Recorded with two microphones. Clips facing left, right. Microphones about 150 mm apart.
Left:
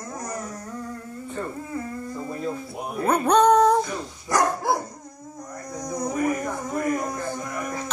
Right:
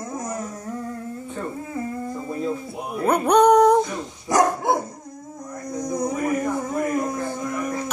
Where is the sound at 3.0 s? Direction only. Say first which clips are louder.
Right 2 dB; 10° right (ahead or behind).